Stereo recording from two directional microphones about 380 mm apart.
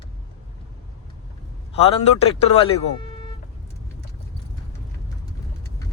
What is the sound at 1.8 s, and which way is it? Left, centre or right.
Speech, centre.